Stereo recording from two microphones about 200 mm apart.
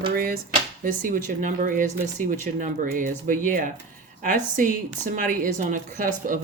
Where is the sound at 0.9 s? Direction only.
45° right (ahead or behind).